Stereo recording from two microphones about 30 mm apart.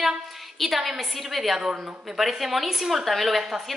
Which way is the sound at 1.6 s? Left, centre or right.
Right.